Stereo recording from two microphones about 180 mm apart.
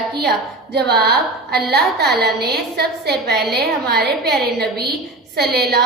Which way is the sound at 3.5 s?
60° right (ahead or behind).